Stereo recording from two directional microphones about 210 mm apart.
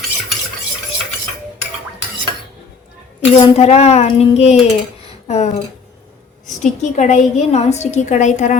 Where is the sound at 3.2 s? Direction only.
30° left (ahead or behind).